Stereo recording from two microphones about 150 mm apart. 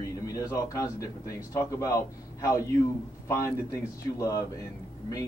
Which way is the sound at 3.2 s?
20° left (ahead or behind).